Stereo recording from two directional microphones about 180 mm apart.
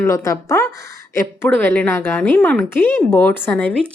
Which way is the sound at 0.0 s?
15° left (ahead or behind).